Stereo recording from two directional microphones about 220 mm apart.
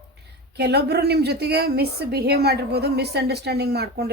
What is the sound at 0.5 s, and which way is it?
A woman's voice, 50° right (ahead or behind).